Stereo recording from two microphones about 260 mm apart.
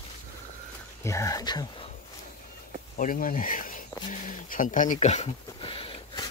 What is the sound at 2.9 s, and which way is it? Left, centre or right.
Speech, left.